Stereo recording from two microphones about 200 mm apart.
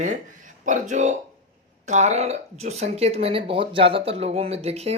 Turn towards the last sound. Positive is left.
turn(degrees=-30)  # may be behind; listen again after turning